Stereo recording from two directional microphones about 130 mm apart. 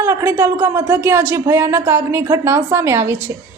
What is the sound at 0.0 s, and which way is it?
Speech, 20° right (ahead or behind).